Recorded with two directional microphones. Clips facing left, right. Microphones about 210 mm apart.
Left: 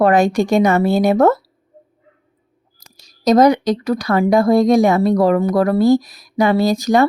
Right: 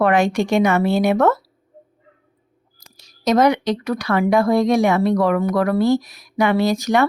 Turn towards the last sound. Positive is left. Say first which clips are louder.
# left 3 dB
turn(degrees=35)  # may be behind; listen again after turning